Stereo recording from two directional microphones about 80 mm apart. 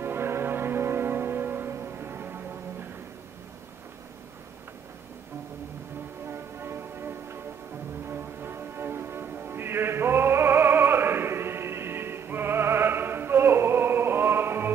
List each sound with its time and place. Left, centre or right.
0.0 s music: right
6.2 s music: right